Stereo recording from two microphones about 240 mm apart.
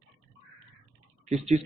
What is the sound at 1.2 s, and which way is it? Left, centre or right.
Speech, right.